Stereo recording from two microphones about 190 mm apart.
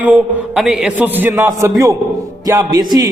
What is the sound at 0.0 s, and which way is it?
A man's voice, 10° right (ahead or behind).